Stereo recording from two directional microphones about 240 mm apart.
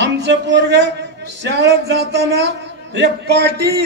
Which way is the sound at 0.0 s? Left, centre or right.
Right.